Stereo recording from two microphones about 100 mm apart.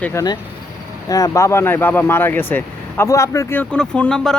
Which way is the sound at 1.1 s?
35° left (ahead or behind).